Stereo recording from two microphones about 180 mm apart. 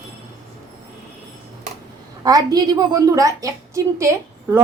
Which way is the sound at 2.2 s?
20° right (ahead or behind).